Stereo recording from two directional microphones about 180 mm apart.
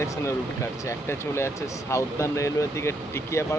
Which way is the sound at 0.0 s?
15° left (ahead or behind).